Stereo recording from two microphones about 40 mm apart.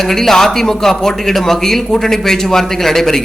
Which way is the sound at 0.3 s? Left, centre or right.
Centre.